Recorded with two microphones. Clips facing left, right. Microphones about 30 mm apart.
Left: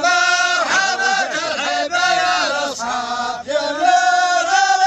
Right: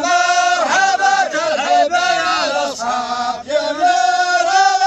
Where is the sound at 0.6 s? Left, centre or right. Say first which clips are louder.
Right 2 dB; centre.